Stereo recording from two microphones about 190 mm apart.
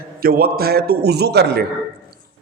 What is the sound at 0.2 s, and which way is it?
A man's voice, 50° right (ahead or behind).